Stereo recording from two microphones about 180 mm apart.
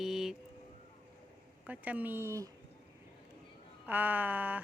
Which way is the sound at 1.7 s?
10° right (ahead or behind).